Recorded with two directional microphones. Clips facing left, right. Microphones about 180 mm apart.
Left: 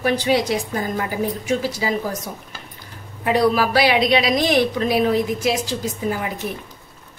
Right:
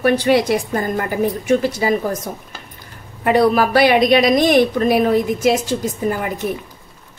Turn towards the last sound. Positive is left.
turn(degrees=-50)  # may be behind; listen again after turning